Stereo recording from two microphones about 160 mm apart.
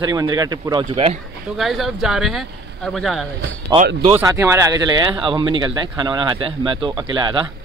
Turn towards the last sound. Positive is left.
turn(degrees=-30)  # may be behind; listen again after turning